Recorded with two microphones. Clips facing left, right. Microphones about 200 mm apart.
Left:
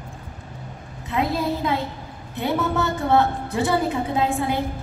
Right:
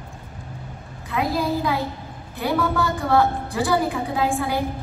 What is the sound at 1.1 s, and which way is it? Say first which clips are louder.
A woman's voice: even; 25° left (ahead or behind).